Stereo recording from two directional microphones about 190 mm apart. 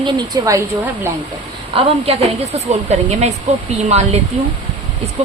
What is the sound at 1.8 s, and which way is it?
A woman's voice, 30° right (ahead or behind).